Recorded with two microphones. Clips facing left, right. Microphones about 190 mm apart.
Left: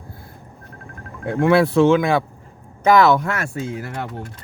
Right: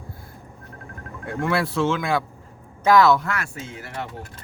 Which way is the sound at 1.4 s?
60° left (ahead or behind).